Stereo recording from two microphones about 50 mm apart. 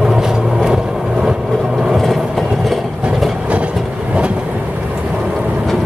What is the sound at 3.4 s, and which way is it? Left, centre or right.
Train, right.